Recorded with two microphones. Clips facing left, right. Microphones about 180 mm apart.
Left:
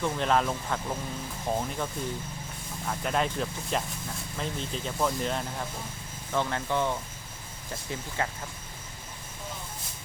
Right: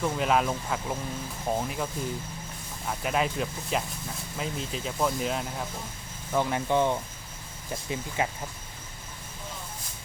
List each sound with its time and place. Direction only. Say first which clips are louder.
0.0 s speech: right 1 dB; 5° right (ahead or behind)
6.3 s speech: right 3 dB; 15° right (ahead or behind)